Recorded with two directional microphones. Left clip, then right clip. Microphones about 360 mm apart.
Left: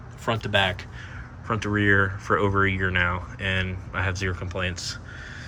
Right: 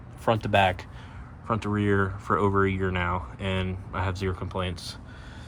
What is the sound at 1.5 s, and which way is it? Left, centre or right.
Speech, centre.